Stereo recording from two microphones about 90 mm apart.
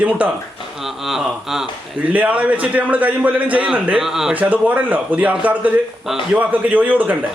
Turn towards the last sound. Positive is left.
turn(degrees=-20)  # may be behind; listen again after turning